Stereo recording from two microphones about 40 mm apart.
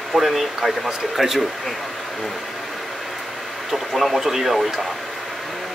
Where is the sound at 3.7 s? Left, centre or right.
Centre.